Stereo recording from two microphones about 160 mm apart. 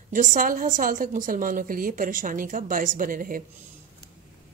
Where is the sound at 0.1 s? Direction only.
55° right (ahead or behind).